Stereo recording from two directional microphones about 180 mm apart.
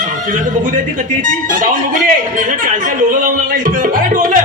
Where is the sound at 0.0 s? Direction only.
50° right (ahead or behind).